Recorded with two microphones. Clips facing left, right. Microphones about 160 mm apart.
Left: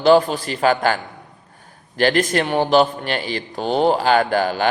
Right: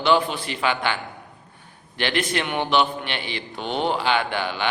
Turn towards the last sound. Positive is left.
turn(degrees=40)  # may be behind; listen again after turning